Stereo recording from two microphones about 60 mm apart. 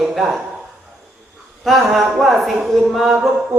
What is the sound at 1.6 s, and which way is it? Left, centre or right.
Speech, centre.